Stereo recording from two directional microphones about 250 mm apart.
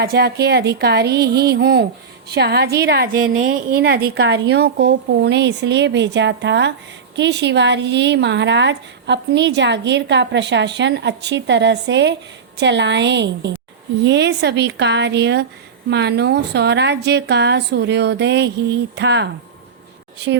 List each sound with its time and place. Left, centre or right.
0.0 s a woman's voice: right